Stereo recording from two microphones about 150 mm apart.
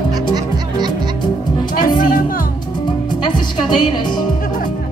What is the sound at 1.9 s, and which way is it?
Music, 70° left (ahead or behind).